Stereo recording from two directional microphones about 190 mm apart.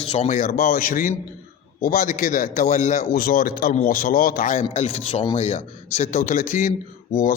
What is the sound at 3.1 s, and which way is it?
Speech, 50° left (ahead or behind).